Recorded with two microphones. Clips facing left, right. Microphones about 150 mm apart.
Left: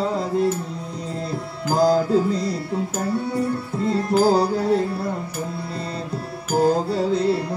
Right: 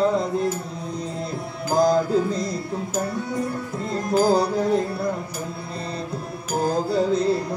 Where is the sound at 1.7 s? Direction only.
30° left (ahead or behind).